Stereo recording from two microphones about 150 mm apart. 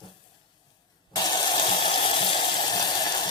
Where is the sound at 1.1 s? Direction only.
30° left (ahead or behind).